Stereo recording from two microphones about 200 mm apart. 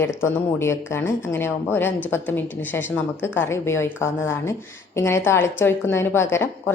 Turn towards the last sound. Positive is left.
turn(degrees=10)  # may be behind; listen again after turning